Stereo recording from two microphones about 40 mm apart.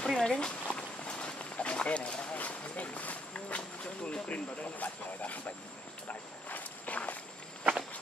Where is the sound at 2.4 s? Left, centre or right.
Left.